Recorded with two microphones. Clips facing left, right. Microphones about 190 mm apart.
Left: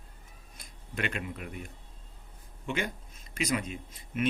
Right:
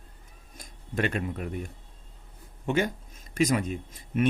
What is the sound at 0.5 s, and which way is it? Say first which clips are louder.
Speech: right 7 dB; 40° right (ahead or behind).